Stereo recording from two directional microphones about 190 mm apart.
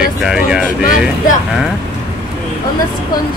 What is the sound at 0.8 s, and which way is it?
Speech, 45° left (ahead or behind).